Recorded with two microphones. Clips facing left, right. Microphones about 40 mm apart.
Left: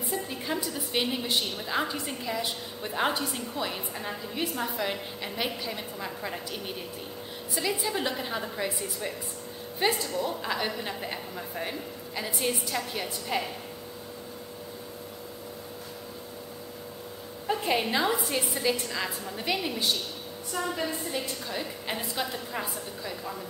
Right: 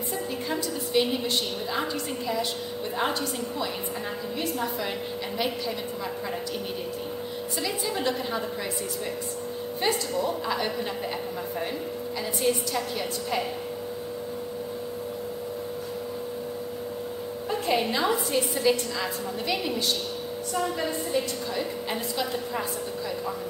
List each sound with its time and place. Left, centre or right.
0.5 s a woman's voice: centre
7.6 s a woman's voice: centre
9.8 s a woman's voice: centre
10.2 s a woman's voice: centre
12.2 s a woman's voice: centre
17.5 s a woman's voice: centre
21.1 s a woman's voice: centre